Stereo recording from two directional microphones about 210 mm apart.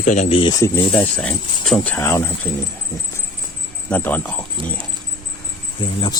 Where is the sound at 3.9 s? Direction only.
5° left (ahead or behind).